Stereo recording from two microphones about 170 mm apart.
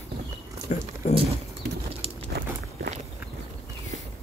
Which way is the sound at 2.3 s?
70° right (ahead or behind).